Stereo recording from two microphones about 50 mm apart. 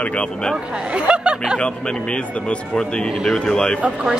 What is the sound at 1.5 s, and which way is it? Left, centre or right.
Speech, centre.